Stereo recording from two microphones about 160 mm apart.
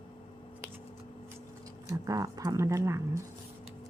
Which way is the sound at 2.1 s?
20° right (ahead or behind).